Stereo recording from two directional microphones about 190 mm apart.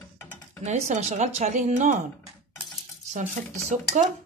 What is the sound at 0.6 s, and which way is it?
A woman's voice, 40° right (ahead or behind).